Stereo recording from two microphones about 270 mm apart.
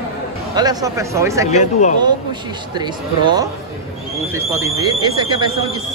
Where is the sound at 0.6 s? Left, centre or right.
Centre.